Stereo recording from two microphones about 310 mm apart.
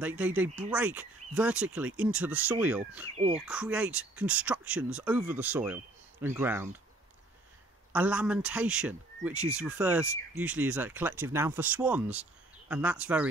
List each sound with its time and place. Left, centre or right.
0.0 s speech: centre
3.2 s speech: centre
3.4 s speech: centre
7.9 s speech: centre